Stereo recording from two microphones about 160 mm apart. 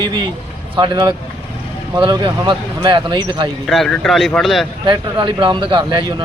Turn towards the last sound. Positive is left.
turn(degrees=-30)  # may be behind; listen again after turning